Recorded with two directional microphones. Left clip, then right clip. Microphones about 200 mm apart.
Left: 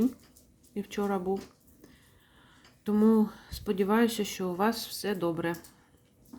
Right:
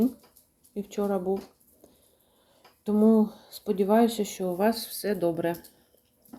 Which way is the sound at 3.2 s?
20° left (ahead or behind).